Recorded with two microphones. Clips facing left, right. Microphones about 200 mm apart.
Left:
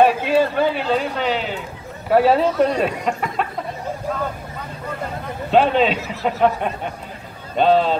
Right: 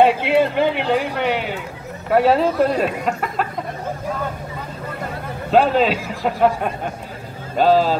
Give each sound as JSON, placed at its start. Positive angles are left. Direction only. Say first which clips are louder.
{"t": 0.0, "sound": "a man's voice", "louder": "right 1 dB", "side_deg": -20}
{"t": 2.0, "sound": "speech", "louder": "even", "side_deg": 0}
{"t": 5.5, "sound": "speech", "louder": "even", "side_deg": -5}